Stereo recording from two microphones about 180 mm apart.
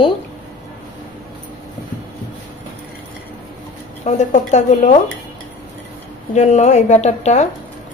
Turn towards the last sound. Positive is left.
turn(degrees=40)  # may be behind; listen again after turning